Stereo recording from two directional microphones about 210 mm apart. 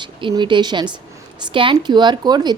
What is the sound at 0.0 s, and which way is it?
Speech, 25° right (ahead or behind).